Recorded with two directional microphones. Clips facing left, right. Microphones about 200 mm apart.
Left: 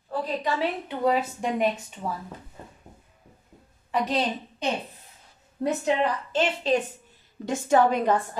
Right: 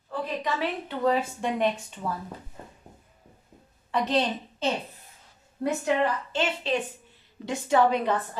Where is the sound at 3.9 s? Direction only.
10° left (ahead or behind).